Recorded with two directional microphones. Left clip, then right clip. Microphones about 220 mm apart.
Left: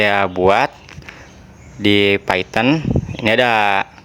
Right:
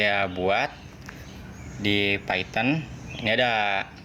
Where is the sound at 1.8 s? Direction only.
40° left (ahead or behind).